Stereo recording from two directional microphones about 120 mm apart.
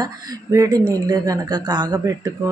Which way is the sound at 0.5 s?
25° right (ahead or behind).